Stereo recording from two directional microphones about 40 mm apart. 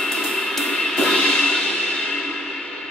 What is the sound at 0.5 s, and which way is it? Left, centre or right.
Music, centre.